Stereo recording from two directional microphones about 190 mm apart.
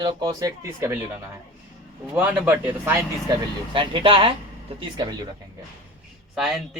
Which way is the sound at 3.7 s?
30° right (ahead or behind).